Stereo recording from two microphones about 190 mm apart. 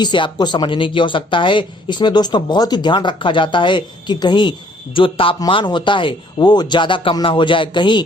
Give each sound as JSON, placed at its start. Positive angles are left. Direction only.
{"t": 0.0, "sound": "speech", "side_deg": 25}